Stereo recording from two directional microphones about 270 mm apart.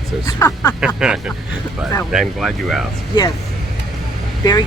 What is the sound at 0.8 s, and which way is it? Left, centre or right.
Speech, centre.